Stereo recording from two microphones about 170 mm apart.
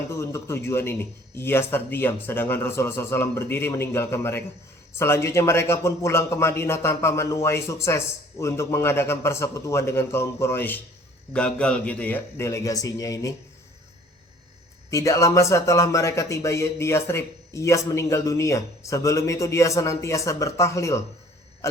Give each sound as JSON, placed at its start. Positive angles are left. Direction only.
{"t": 0.1, "sound": "a man's voice", "side_deg": 15}
{"t": 14.8, "sound": "a man's voice", "side_deg": 20}